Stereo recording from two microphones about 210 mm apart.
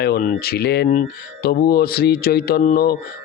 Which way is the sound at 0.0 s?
45° left (ahead or behind).